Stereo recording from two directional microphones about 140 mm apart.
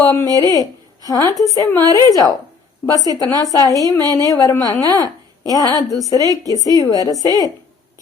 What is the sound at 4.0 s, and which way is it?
Speech, 25° right (ahead or behind).